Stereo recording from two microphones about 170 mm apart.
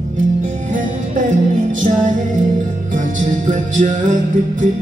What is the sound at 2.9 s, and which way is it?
Music, 50° right (ahead or behind).